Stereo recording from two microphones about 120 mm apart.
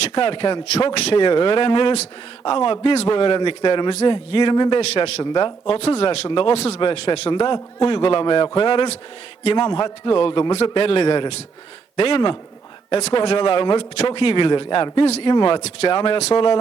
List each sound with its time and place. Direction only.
0.1 s a man's voice: 50° left (ahead or behind)
6.2 s a man's voice: 50° left (ahead or behind)